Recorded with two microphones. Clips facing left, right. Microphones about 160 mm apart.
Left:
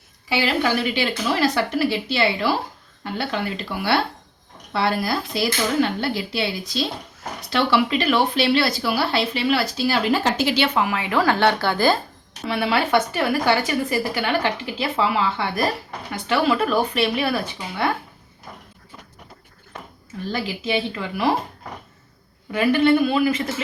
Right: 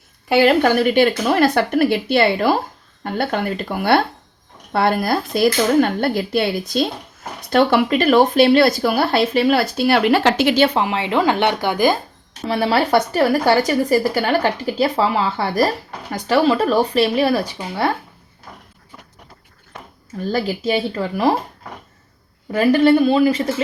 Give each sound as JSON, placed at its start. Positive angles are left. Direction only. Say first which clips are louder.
{"t": 0.3, "sound": "speech", "louder": "right 8 dB", "side_deg": -50}
{"t": 10.8, "sound": "speech", "louder": "right 3 dB", "side_deg": -25}
{"t": 12.5, "sound": "a woman's voice", "louder": "right 4 dB", "side_deg": -35}
{"t": 20.3, "sound": "a woman's voice", "louder": "right 5 dB", "side_deg": -40}
{"t": 22.5, "sound": "a woman's voice", "louder": "right 4 dB", "side_deg": -40}